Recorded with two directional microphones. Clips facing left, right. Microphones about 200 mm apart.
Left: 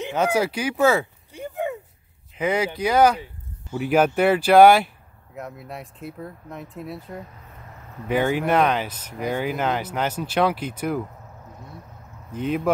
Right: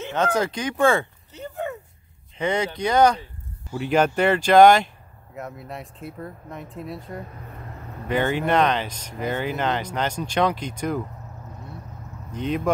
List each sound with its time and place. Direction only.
0.0 s a sound: 10° left (ahead or behind)
2.3 s speech: 5° left (ahead or behind)
12.3 s speech: 5° left (ahead or behind)